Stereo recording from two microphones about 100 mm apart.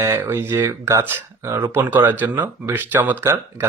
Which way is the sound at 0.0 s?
25° right (ahead or behind).